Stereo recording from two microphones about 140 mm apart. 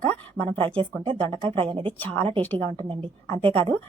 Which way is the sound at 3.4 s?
40° right (ahead or behind).